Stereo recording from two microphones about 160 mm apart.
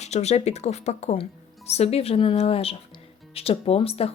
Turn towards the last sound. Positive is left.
turn(degrees=35)  # may be behind; listen again after turning